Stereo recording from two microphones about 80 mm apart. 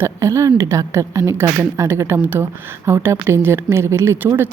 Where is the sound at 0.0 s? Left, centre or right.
Right.